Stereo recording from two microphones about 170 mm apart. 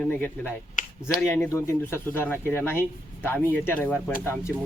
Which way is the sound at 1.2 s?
10° left (ahead or behind).